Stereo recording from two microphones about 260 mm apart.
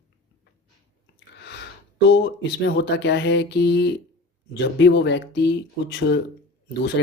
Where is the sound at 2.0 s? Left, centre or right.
Left.